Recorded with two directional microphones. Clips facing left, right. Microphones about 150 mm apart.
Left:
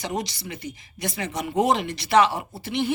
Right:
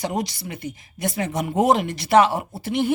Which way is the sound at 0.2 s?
50° right (ahead or behind).